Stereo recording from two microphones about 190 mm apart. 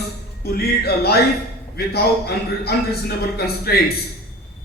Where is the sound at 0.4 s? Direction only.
55° left (ahead or behind).